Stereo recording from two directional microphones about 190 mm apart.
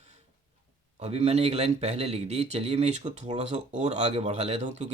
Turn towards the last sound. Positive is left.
turn(degrees=-35)  # may be behind; listen again after turning